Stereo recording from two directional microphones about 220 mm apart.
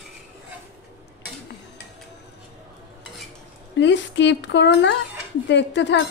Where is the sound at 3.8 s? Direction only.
55° left (ahead or behind).